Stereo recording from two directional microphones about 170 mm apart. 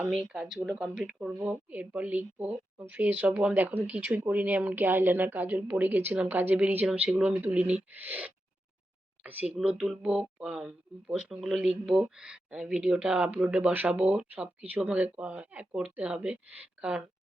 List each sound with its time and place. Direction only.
0.0 s speech: 5° right (ahead or behind)